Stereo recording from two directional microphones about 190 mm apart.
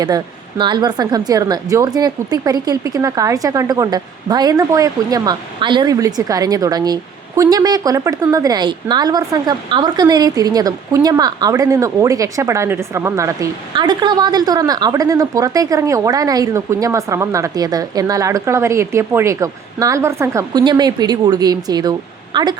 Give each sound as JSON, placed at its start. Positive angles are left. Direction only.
{"t": 0.6, "sound": "speech", "side_deg": -20}